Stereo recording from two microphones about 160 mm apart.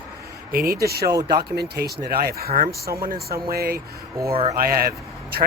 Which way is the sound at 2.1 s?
75° right (ahead or behind).